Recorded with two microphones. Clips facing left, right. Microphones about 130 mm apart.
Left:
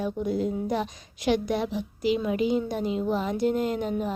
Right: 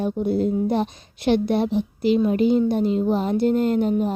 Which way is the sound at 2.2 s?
45° right (ahead or behind).